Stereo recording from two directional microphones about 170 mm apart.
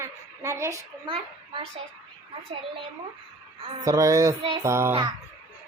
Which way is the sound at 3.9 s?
20° right (ahead or behind).